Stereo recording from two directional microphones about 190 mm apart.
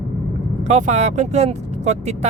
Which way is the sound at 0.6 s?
35° right (ahead or behind).